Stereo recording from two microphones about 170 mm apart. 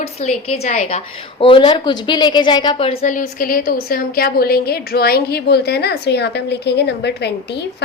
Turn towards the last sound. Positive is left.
turn(degrees=80)